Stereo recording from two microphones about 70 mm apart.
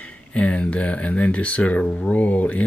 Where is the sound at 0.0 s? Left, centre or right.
Centre.